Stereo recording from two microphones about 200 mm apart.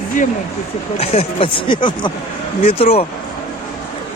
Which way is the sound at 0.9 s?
30° left (ahead or behind).